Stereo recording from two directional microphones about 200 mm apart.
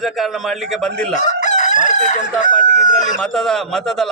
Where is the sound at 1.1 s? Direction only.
35° left (ahead or behind).